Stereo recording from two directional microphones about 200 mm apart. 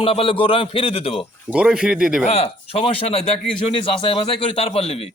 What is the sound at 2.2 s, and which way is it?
A man's voice, 30° left (ahead or behind).